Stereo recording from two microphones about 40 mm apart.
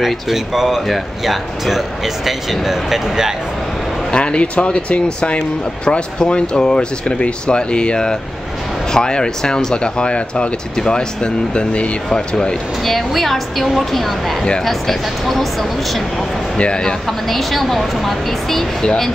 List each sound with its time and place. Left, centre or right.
0.0 s speech: centre
4.1 s speech: left
12.8 s speech: centre
16.5 s speech: left
17.3 s speech: centre